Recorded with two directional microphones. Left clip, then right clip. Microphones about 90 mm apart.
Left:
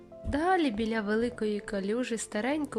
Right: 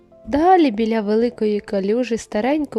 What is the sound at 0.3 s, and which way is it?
Speech, 90° right.